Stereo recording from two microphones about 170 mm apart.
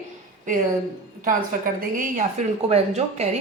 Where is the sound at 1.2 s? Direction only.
55° right (ahead or behind).